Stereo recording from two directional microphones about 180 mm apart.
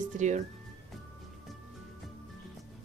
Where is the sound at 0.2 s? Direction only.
40° right (ahead or behind).